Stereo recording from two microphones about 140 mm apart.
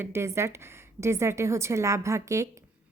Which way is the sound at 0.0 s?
20° right (ahead or behind).